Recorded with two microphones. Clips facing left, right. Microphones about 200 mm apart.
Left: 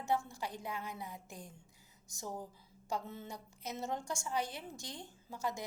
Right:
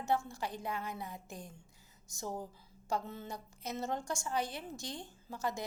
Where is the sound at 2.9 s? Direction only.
15° left (ahead or behind).